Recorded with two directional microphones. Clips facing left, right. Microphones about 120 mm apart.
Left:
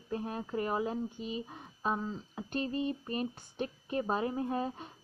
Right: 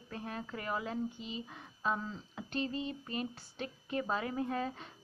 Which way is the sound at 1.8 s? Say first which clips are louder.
Left 2 dB; 15° left (ahead or behind).